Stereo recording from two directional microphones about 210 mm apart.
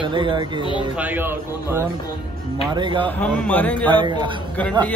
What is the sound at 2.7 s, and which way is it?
Speech, 20° right (ahead or behind).